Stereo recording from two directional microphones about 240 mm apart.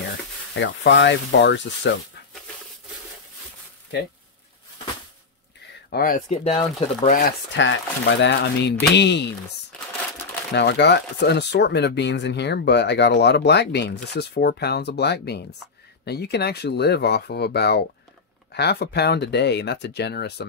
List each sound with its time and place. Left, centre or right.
0.6 s speech: left
3.9 s speech: left
5.9 s speech: left
7.1 s speech: left
10.5 s speech: left